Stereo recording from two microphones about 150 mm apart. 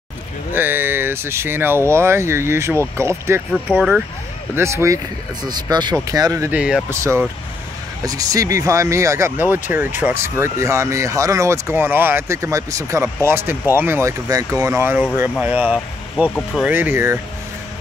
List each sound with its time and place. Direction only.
0.5 s speech: 15° right (ahead or behind)
6.5 s speech: 5° right (ahead or behind)
6.9 s speech: 20° right (ahead or behind)